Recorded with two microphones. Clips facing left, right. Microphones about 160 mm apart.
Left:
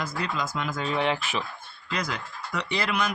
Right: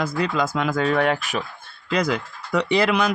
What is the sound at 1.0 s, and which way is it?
Speech, 45° right (ahead or behind).